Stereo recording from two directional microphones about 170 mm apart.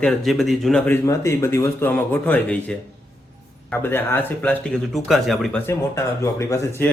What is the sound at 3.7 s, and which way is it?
Speech, 10° left (ahead or behind).